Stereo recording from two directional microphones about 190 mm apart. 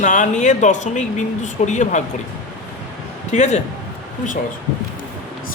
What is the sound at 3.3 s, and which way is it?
Speech, 35° left (ahead or behind).